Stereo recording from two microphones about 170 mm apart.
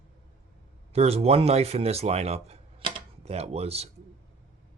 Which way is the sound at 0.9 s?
35° right (ahead or behind).